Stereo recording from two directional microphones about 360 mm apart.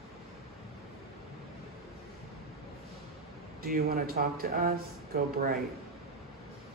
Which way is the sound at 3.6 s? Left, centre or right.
Right.